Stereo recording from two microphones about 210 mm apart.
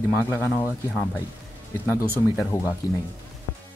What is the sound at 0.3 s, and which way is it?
Speech, 10° left (ahead or behind).